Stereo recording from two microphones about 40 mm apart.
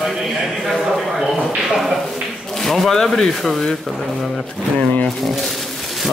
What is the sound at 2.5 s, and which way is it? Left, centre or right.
Speech, centre.